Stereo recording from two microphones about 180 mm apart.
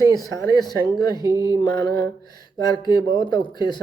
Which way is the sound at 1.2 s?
20° right (ahead or behind).